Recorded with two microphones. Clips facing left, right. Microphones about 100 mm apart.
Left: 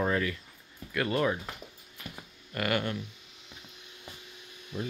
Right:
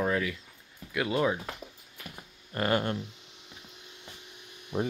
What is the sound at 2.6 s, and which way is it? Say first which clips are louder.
Speech: right 2 dB; 30° right (ahead or behind).